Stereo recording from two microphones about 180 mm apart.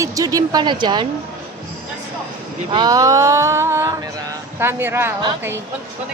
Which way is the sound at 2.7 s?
25° right (ahead or behind).